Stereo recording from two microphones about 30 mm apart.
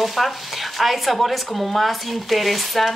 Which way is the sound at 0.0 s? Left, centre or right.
Centre.